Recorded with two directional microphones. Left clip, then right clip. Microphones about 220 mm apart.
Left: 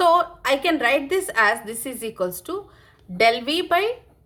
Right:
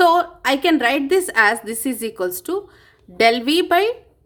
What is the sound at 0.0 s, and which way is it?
A woman's voice, 55° right (ahead or behind).